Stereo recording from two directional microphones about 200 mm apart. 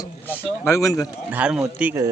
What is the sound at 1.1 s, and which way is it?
Speech, 5° right (ahead or behind).